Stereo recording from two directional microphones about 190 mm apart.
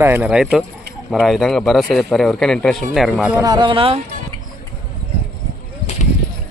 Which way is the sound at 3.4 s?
20° right (ahead or behind).